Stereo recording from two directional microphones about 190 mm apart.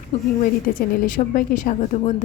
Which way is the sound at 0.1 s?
35° left (ahead or behind).